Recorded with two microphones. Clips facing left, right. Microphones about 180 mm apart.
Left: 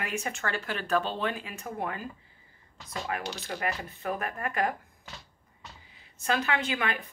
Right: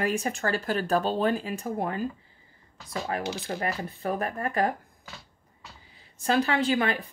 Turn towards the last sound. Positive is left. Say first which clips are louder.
# right 5 dB
turn(degrees=-35)  # may be behind; listen again after turning